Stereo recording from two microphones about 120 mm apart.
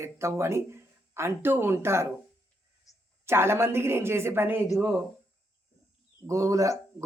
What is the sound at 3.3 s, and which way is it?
Speech, 20° right (ahead or behind).